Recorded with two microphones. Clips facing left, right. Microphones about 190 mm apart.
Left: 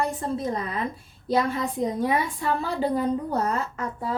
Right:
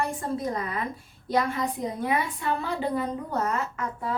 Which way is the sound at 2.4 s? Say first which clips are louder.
Left 3 dB; 35° left (ahead or behind).